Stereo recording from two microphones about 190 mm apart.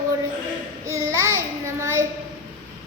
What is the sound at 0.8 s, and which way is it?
Speech, 15° right (ahead or behind).